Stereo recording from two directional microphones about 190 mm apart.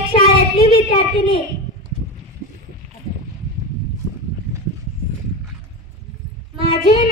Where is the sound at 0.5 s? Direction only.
30° left (ahead or behind).